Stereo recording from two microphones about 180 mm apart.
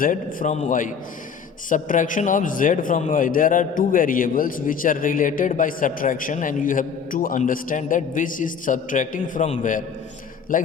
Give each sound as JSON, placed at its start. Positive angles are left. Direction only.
{"t": 0.0, "sound": "a man's voice", "side_deg": 50}